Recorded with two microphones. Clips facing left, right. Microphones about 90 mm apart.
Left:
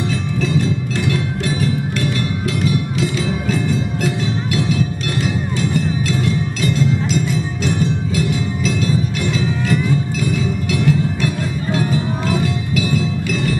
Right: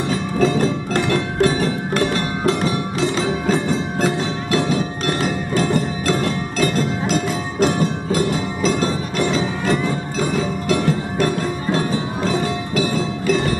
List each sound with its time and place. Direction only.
0.1 s music: 45° right (ahead or behind)